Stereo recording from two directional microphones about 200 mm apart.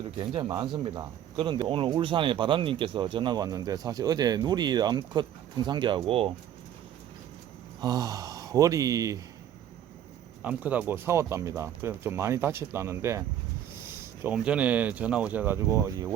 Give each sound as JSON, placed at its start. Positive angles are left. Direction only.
{"t": 0.2, "sound": "speech", "side_deg": -20}
{"t": 7.8, "sound": "speech", "side_deg": -20}
{"t": 10.4, "sound": "speech", "side_deg": -5}